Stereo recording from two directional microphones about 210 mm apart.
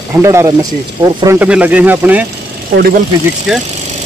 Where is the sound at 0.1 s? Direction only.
15° right (ahead or behind).